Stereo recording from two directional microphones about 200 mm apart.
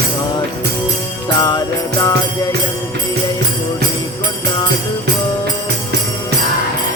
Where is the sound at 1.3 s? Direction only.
20° left (ahead or behind).